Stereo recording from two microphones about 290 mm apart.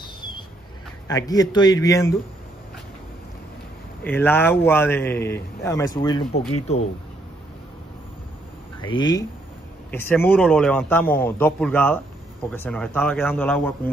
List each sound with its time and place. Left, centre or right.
0.0 s vehicle: centre
1.0 s a man's voice: centre
4.0 s a man's voice: centre; by 6.8 s left
8.8 s a man's voice: centre